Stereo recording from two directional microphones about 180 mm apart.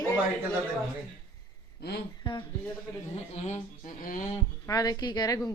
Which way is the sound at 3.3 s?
45° left (ahead or behind).